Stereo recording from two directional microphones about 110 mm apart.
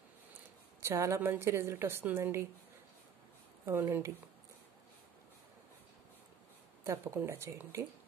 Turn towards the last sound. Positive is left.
turn(degrees=-25)  # may be behind; listen again after turning